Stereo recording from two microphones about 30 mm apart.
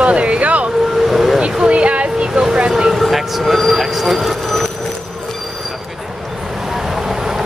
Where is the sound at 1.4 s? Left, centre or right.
Right.